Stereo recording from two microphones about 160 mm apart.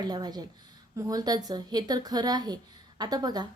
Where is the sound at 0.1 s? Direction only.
25° right (ahead or behind).